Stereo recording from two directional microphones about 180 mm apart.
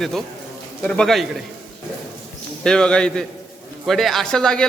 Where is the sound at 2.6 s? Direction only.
5° left (ahead or behind).